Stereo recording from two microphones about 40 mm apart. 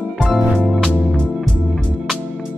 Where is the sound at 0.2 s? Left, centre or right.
Centre.